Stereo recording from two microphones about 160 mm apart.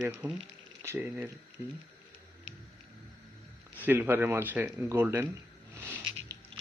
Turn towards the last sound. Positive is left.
turn(degrees=-30)  # may be behind; listen again after turning